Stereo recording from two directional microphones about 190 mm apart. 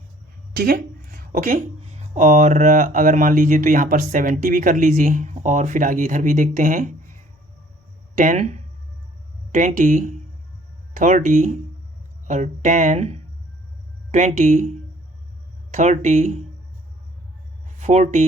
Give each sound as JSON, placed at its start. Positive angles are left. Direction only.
{"t": 0.5, "sound": "speech", "side_deg": -50}
{"t": 17.7, "sound": "speech", "side_deg": -35}